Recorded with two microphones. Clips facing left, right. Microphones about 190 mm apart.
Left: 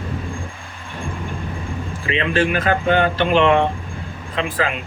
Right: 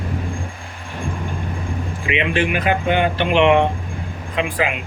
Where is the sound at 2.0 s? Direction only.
15° right (ahead or behind).